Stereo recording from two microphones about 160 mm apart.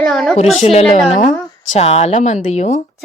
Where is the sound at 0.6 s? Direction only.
40° left (ahead or behind).